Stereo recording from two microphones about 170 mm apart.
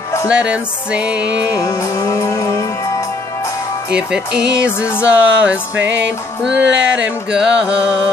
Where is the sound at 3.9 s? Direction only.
5° right (ahead or behind).